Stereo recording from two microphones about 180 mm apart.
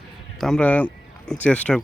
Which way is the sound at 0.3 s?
Centre (ahead or behind).